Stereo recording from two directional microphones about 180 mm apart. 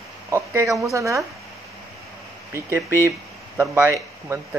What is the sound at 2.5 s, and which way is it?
Speech, 15° right (ahead or behind).